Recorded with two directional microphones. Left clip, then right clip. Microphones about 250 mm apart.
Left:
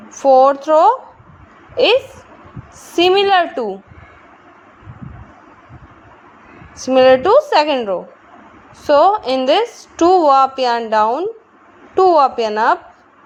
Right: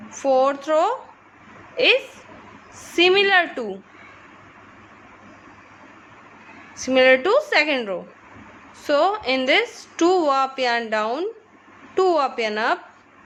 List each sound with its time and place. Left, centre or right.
0.1 s a woman's voice: centre
6.7 s a woman's voice: centre